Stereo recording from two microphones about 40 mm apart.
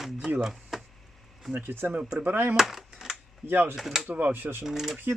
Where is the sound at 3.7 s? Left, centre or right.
Centre.